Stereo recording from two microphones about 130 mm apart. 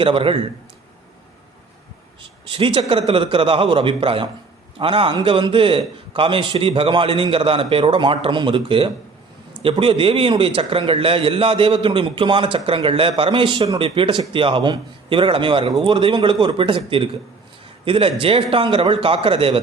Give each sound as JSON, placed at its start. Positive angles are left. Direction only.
{"t": 0.0, "sound": "a man's voice", "side_deg": -45}
{"t": 2.2, "sound": "a man's voice", "side_deg": -40}